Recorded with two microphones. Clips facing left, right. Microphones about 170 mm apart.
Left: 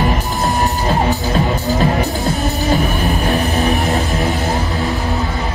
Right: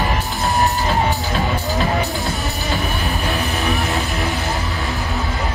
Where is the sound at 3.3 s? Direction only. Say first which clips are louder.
Left 5 dB; 40° left (ahead or behind).